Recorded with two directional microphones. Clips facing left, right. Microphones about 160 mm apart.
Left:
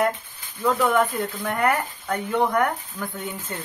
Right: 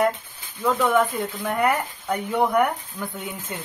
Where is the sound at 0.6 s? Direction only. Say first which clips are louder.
Even; centre (ahead or behind).